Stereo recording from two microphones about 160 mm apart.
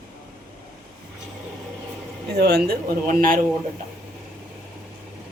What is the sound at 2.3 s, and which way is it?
Speech, 85° right.